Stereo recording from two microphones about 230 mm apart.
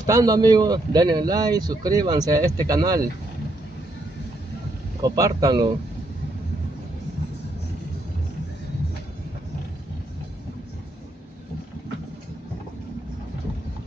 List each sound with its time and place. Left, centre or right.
0.0 s speech: centre
5.0 s speech: centre